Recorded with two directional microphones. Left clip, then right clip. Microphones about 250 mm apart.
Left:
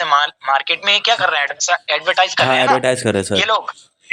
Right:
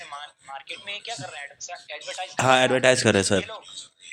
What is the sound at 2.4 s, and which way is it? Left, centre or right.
Speech, centre.